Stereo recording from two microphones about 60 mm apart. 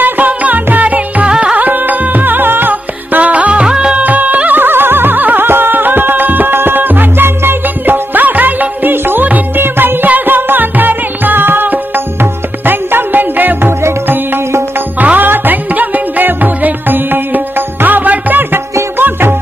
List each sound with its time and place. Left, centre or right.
0.0 s music: right
4.0 s music: right